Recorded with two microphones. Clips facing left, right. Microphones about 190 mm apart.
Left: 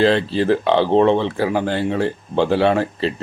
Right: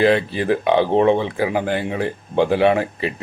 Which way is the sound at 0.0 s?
15° right (ahead or behind).